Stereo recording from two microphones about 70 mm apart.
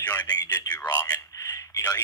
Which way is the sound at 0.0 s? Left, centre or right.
Left.